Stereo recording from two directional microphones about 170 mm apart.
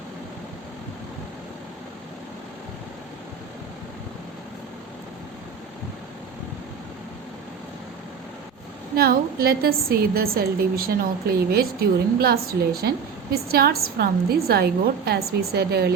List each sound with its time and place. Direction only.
9.0 s a woman's voice: 65° right (ahead or behind)